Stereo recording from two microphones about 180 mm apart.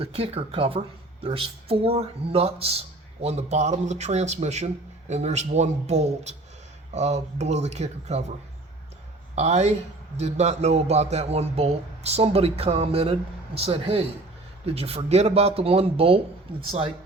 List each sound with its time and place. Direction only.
0.0 s speech: 30° right (ahead or behind)
9.3 s speech: 40° right (ahead or behind)